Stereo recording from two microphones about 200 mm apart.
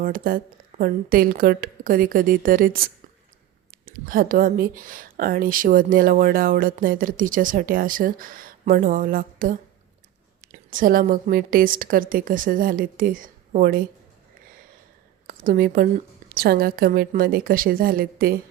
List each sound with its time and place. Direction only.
0.0 s speech: 45° right (ahead or behind)
15.3 s a woman's voice: 45° right (ahead or behind)